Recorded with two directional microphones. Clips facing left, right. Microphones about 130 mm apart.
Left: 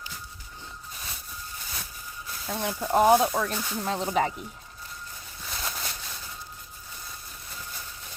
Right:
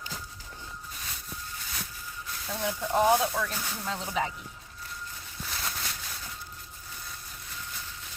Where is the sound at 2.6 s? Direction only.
60° left (ahead or behind).